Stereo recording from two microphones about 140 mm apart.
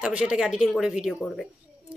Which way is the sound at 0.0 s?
5° right (ahead or behind).